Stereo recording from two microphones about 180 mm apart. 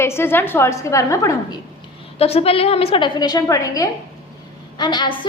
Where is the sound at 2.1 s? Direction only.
35° left (ahead or behind).